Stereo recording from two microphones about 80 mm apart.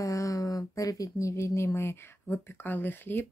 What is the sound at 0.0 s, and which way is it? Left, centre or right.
Speech, left.